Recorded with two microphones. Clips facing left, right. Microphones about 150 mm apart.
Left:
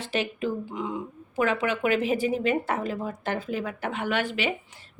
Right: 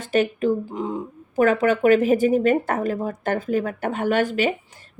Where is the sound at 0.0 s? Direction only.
45° right (ahead or behind).